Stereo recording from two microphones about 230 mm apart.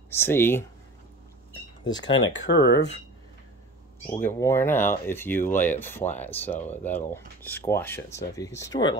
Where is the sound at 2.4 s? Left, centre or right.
Left.